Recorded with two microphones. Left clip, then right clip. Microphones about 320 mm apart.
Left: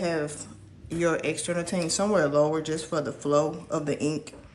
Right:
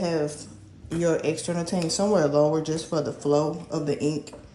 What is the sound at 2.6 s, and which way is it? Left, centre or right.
Speech, centre.